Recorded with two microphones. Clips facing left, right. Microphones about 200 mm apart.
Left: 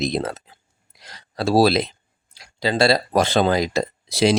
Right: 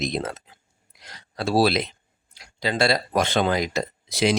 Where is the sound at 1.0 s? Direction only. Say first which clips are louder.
Left 4 dB; 35° left (ahead or behind).